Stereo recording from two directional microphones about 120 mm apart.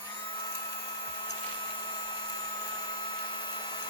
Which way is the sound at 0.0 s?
40° left (ahead or behind).